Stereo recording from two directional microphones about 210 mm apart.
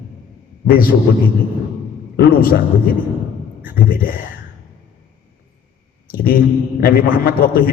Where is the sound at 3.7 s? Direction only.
45° left (ahead or behind).